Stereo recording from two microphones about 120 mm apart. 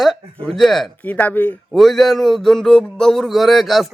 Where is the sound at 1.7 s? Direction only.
Centre (ahead or behind).